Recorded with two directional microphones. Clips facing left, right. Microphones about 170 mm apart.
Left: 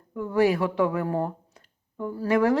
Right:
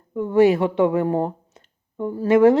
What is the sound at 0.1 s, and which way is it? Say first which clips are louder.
Speech: right 6 dB; 25° right (ahead or behind).